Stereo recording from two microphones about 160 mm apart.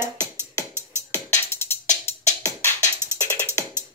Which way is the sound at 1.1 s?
15° left (ahead or behind).